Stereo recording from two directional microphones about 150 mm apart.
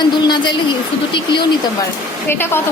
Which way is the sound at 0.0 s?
30° left (ahead or behind).